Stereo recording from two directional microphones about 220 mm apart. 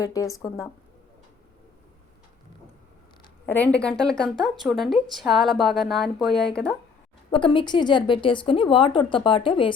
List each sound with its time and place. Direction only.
0.0 s speech: 15° left (ahead or behind)
3.4 s speech: 10° left (ahead or behind)
7.3 s a woman's voice: 20° left (ahead or behind)